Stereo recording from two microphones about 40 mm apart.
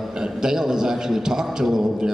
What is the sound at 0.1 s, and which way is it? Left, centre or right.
A man's voice, centre.